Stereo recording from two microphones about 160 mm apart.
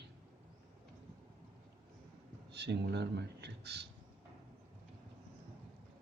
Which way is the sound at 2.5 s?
90° right.